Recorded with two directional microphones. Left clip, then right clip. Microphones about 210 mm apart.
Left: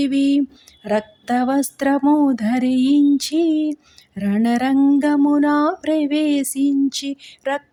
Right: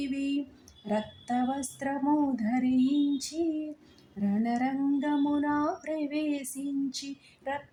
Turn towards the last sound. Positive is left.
turn(degrees=40)  # may be behind; listen again after turning